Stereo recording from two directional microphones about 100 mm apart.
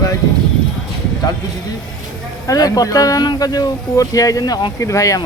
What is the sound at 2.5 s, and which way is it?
Speech, 35° left (ahead or behind).